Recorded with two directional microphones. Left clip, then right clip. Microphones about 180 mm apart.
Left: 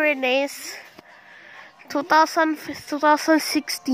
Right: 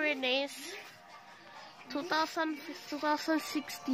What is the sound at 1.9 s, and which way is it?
Speech, 60° left (ahead or behind).